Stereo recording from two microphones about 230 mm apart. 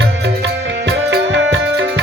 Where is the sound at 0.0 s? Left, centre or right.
Right.